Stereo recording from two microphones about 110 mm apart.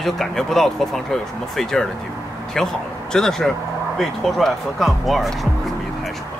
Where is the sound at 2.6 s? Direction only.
5° left (ahead or behind).